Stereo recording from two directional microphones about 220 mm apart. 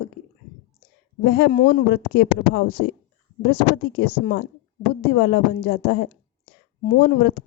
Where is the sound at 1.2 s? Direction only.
45° left (ahead or behind).